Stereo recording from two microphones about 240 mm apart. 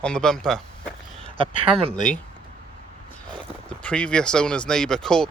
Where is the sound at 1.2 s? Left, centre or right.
Right.